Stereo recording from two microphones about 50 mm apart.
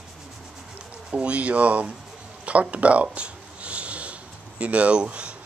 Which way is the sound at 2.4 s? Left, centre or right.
Right.